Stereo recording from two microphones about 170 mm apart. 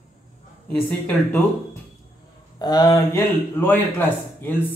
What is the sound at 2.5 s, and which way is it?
Speech, 25° left (ahead or behind).